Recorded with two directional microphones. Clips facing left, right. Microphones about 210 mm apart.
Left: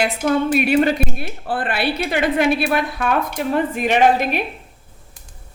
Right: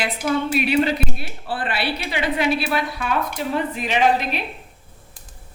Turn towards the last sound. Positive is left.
turn(degrees=50)  # may be behind; listen again after turning